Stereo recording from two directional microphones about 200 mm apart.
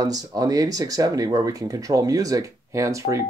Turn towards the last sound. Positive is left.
turn(degrees=-15)  # may be behind; listen again after turning